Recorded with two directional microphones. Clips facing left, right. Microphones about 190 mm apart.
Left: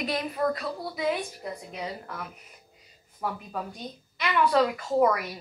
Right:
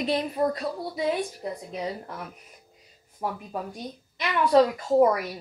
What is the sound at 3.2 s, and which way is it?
Speech, 20° right (ahead or behind).